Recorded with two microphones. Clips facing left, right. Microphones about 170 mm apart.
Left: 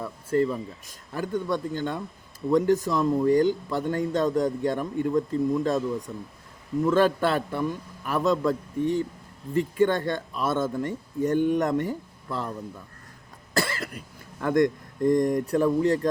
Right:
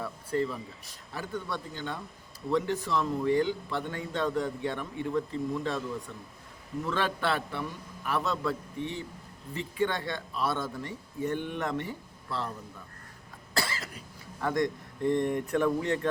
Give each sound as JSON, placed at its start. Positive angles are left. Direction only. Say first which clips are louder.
{"t": 0.0, "sound": "a man's voice", "louder": "left 6 dB", "side_deg": 45}
{"t": 13.5, "sound": "cough", "louder": "left 6 dB", "side_deg": 50}
{"t": 14.4, "sound": "speech", "louder": "left 7 dB", "side_deg": 50}